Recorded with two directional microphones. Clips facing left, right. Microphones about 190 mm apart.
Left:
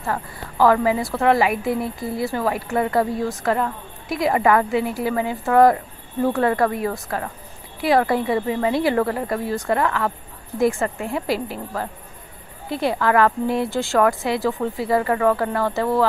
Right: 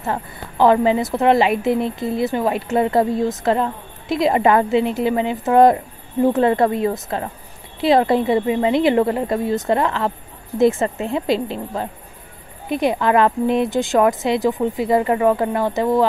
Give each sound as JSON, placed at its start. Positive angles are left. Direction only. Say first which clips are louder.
{"t": 0.0, "sound": "a woman's voice", "louder": "right 2 dB", "side_deg": -20}